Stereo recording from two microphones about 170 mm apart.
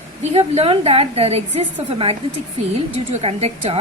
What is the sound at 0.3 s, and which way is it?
A woman's voice, 35° right (ahead or behind).